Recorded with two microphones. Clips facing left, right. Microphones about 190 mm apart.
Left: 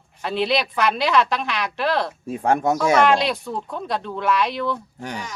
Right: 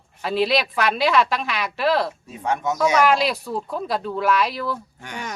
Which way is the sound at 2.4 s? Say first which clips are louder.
Left 4 dB; 50° left (ahead or behind).